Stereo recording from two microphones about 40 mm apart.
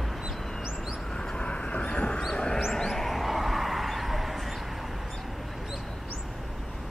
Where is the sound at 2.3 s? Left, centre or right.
Left.